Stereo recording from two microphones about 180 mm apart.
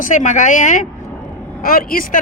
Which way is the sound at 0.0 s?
45° left (ahead or behind).